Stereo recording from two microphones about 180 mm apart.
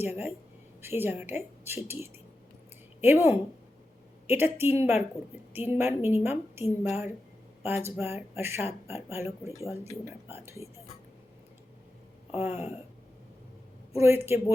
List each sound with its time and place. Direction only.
0.0 s speech: 10° right (ahead or behind)
12.3 s speech: 10° right (ahead or behind)
13.9 s speech: 15° right (ahead or behind)